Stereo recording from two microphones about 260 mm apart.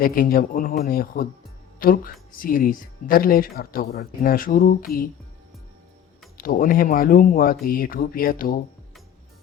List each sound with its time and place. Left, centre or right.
0.0 s speech: left
6.3 s speech: left